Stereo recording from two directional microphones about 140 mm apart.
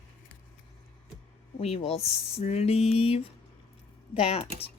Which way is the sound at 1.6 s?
45° left (ahead or behind).